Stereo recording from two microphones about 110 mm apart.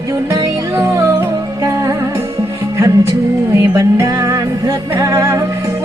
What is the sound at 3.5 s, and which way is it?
Music, 30° right (ahead or behind).